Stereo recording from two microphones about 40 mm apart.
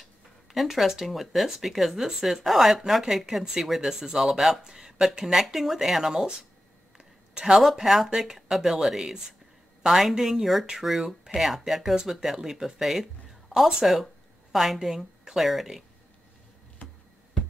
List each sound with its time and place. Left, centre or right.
0.0 s speech: centre
7.0 s a sound: centre
7.7 s a woman's voice: centre